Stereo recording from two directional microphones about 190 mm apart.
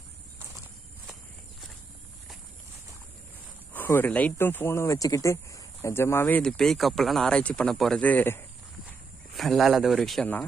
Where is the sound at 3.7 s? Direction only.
10° left (ahead or behind).